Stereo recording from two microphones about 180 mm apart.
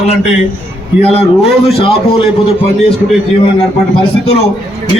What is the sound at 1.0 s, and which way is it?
Speech, 35° left (ahead or behind).